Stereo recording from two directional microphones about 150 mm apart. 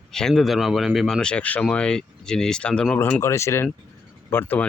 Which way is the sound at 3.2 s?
20° left (ahead or behind).